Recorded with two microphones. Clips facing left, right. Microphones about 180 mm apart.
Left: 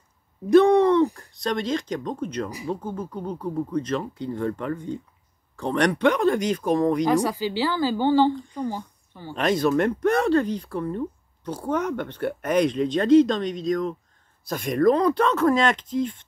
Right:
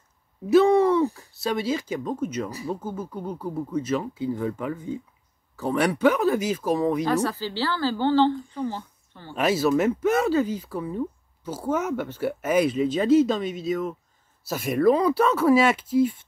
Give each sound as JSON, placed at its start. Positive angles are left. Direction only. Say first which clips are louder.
{"t": 0.5, "sound": "speech", "louder": "left 2 dB", "side_deg": -5}
{"t": 7.1, "sound": "a woman's voice", "louder": "left 3 dB", "side_deg": 15}
{"t": 9.3, "sound": "speech", "louder": "even", "side_deg": -5}